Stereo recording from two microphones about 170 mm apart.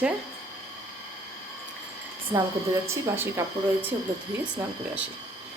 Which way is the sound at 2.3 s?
15° right (ahead or behind).